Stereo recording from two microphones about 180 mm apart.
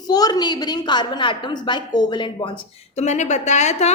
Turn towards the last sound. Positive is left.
turn(degrees=40)  # may be behind; listen again after turning